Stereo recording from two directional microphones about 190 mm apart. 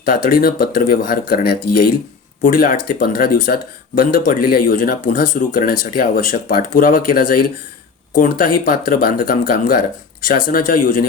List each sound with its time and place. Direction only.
0.0 s speech: 50° left (ahead or behind)